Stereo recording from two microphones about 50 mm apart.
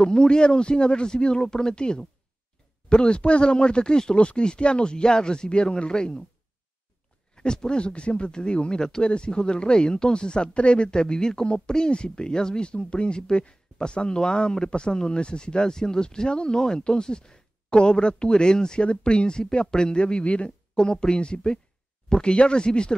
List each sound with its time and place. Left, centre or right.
0.0 s speech: centre
7.3 s speech: centre